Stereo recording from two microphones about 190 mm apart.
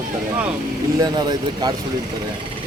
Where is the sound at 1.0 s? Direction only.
20° right (ahead or behind).